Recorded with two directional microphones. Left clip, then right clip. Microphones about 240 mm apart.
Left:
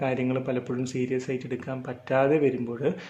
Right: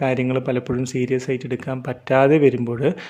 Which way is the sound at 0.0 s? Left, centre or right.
Right.